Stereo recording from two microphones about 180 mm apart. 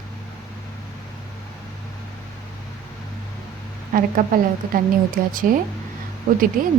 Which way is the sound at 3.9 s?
50° right (ahead or behind).